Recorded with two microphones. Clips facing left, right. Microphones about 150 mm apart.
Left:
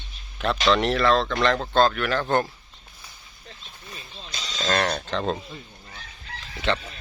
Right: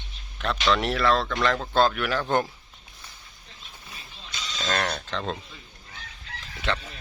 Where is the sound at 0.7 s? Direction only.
5° right (ahead or behind).